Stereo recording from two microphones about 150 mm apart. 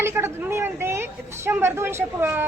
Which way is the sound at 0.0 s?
15° right (ahead or behind).